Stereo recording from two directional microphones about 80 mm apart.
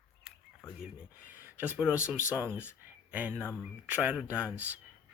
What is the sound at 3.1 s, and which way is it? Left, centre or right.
Speech, centre.